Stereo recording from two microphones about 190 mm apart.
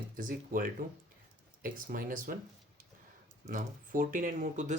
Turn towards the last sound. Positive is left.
turn(degrees=-40)  # may be behind; listen again after turning